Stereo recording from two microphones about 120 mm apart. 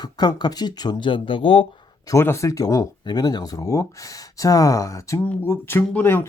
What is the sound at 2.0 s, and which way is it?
Speech, 25° left (ahead or behind).